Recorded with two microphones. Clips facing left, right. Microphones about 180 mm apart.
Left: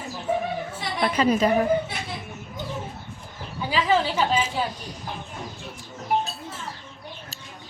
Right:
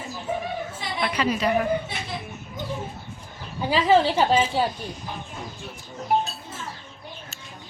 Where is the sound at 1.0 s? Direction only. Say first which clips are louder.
Left 3 dB; 40° left (ahead or behind).